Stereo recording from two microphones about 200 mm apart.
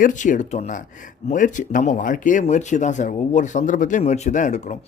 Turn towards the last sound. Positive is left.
turn(degrees=35)  # may be behind; listen again after turning